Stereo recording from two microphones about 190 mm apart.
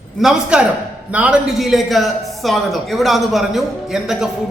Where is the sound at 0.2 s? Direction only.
5° right (ahead or behind).